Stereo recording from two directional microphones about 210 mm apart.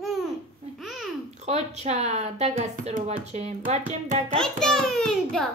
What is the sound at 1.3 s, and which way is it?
A woman's voice, 30° right (ahead or behind).